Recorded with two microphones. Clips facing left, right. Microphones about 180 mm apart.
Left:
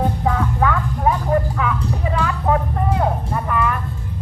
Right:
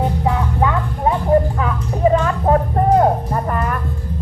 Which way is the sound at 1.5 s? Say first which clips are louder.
Right 1 dB; 35° right (ahead or behind).